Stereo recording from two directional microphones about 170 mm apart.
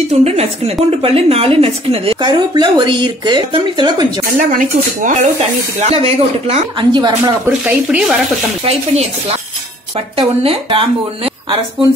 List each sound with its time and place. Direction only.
0.1 s a woman's voice: 40° right (ahead or behind)
4.4 s a woman's voice: 50° right (ahead or behind); by 7.3 s 25° right (ahead or behind)
7.4 s speech: 10° right (ahead or behind)
8.6 s a woman's voice: 35° right (ahead or behind)
10.1 s a woman's voice: 35° right (ahead or behind)